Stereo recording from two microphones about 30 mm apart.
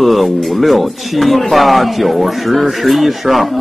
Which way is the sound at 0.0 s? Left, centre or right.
Centre.